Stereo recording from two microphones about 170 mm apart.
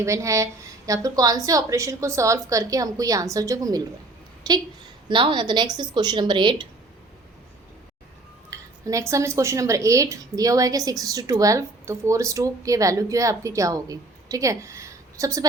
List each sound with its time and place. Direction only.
0.0 s a woman's voice: 15° right (ahead or behind)
8.4 s a woman's voice: 20° right (ahead or behind)